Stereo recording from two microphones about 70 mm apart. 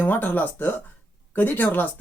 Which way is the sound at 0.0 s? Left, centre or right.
Left.